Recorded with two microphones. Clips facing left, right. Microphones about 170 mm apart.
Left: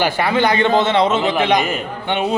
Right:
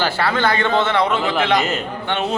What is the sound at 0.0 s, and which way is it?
A man's voice, 15° left (ahead or behind).